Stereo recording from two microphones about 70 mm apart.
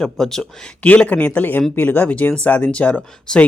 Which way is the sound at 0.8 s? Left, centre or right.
Centre.